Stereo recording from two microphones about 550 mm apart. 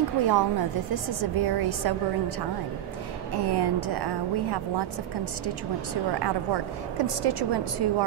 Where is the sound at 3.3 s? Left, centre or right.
Right.